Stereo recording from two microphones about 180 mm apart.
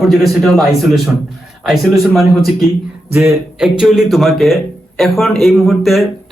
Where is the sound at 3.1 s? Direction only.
15° right (ahead or behind).